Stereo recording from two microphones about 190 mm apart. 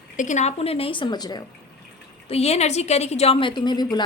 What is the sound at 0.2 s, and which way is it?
Speech, 40° left (ahead or behind).